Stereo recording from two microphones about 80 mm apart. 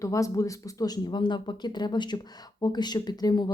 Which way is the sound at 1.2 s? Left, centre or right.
Left.